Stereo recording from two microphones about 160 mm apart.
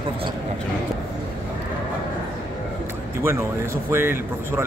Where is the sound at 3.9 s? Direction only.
15° right (ahead or behind).